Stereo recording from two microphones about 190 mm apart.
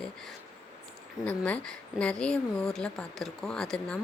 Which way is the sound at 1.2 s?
5° left (ahead or behind).